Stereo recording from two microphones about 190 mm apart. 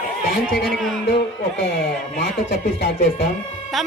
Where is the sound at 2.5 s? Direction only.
55° left (ahead or behind).